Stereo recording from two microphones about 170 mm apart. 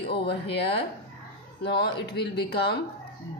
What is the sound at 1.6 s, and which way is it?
A woman's voice, 75° left (ahead or behind).